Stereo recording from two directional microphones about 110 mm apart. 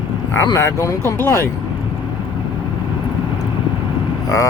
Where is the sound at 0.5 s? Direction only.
30° left (ahead or behind).